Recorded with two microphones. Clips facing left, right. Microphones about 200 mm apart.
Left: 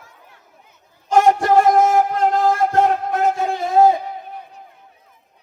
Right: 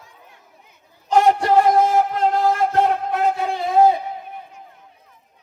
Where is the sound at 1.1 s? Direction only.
45° left (ahead or behind).